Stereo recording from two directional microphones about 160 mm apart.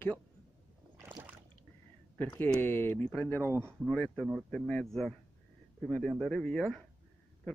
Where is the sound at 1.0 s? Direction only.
10° right (ahead or behind).